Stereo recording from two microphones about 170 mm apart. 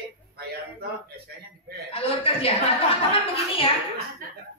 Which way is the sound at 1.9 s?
35° left (ahead or behind).